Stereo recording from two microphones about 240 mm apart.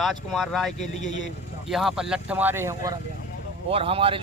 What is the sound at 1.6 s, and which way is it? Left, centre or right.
Speech, centre.